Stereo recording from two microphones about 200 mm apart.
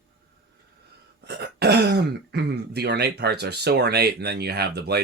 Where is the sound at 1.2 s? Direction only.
55° right (ahead or behind).